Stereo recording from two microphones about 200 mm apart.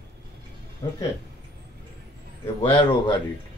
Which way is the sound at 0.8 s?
20° left (ahead or behind).